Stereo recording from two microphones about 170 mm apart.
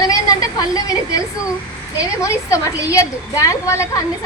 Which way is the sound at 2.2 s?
20° left (ahead or behind).